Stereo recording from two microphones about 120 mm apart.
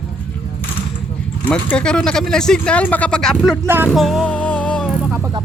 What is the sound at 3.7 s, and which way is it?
Music, 15° right (ahead or behind).